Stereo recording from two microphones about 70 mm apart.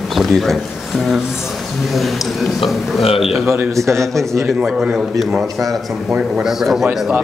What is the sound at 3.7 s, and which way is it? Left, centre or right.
Speech, right.